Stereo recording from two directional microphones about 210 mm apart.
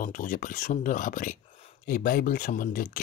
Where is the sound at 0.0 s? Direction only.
40° left (ahead or behind).